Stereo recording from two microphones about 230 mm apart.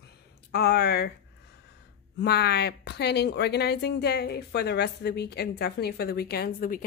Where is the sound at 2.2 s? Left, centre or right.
Left.